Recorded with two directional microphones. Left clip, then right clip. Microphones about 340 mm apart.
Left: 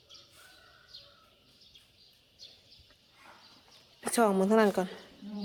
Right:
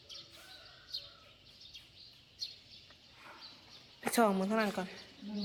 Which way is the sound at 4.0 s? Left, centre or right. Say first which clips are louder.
Left 4 dB; centre.